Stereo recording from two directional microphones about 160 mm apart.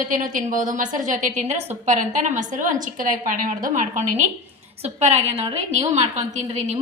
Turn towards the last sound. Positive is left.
turn(degrees=-45)  # may be behind; listen again after turning